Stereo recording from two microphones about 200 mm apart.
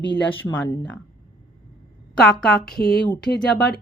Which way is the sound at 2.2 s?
5° left (ahead or behind).